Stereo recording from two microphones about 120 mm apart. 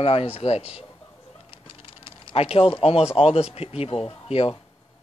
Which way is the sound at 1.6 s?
50° left (ahead or behind).